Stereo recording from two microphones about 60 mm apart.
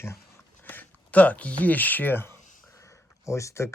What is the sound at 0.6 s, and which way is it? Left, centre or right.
Speech, left.